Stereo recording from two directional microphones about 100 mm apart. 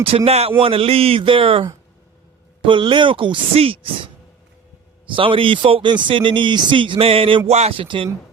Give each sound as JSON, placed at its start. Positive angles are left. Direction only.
{"t": 0.3, "sound": "speech", "side_deg": -90}
{"t": 0.6, "sound": "speech", "side_deg": -70}
{"t": 5.1, "sound": "speech", "side_deg": -60}